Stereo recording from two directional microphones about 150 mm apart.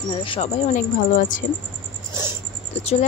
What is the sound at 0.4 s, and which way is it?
Speech, 55° left (ahead or behind).